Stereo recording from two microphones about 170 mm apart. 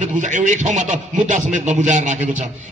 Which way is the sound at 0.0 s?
45° right (ahead or behind).